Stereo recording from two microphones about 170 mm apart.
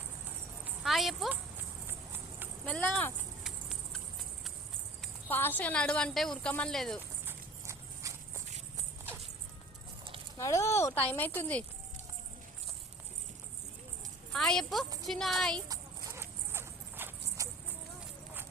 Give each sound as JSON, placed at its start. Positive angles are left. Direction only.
{"t": 0.6, "sound": "a sound", "side_deg": 0}
{"t": 1.9, "sound": "clip-clop", "side_deg": -10}
{"t": 2.6, "sound": "speech", "side_deg": 5}
{"t": 3.4, "sound": "a sound", "side_deg": 0}
{"t": 5.3, "sound": "speech", "side_deg": 10}
{"t": 7.3, "sound": "horse", "side_deg": -15}
{"t": 10.3, "sound": "speech", "side_deg": 20}
{"t": 14.3, "sound": "speech", "side_deg": 5}
{"t": 15.5, "sound": "clip-clop", "side_deg": -20}